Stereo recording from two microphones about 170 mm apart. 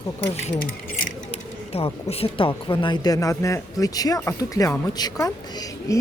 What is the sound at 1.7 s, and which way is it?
Speech, 35° left (ahead or behind).